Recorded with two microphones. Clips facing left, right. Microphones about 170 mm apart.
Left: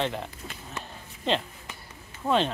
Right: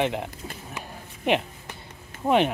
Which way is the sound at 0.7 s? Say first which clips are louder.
Right 2 dB; 15° right (ahead or behind).